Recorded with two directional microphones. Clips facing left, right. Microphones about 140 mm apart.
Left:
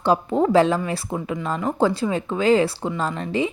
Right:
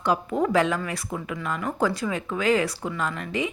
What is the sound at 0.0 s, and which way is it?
Speech, 30° left (ahead or behind).